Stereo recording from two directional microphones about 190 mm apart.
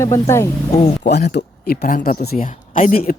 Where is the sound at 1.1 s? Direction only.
60° left (ahead or behind).